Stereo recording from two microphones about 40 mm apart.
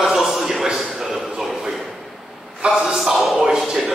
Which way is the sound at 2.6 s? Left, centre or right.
Right.